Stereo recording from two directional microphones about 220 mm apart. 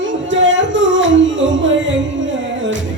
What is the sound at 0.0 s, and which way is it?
Music, 55° right (ahead or behind).